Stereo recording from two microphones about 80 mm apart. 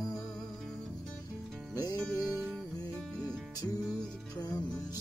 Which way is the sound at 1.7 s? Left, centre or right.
Left.